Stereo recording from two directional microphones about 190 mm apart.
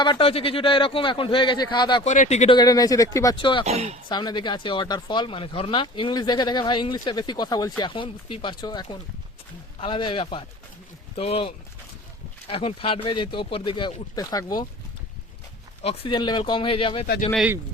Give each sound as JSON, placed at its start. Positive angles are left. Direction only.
{"t": 0.0, "sound": "speech", "side_deg": 25}
{"t": 2.0, "sound": "speech", "side_deg": 40}
{"t": 2.6, "sound": "speech", "side_deg": 20}
{"t": 3.7, "sound": "speech", "side_deg": -35}
{"t": 4.1, "sound": "speech", "side_deg": 20}
{"t": 15.8, "sound": "speech", "side_deg": 30}
{"t": 17.3, "sound": "speech", "side_deg": -5}